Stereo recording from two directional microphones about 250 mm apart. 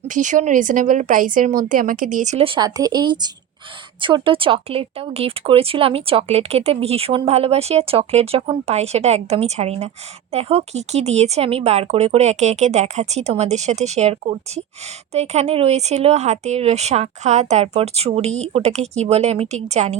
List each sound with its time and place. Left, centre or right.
0.1 s a woman's voice: right